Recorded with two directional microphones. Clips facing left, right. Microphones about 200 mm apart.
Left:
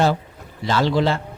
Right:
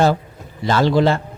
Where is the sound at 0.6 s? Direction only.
50° right (ahead or behind).